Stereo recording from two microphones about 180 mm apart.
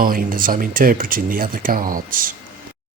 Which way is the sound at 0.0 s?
50° right (ahead or behind).